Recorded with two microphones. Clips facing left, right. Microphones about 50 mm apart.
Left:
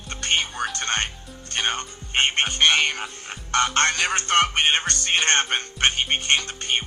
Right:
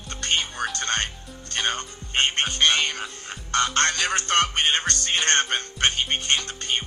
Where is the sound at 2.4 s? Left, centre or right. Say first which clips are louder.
Left 2 dB; left.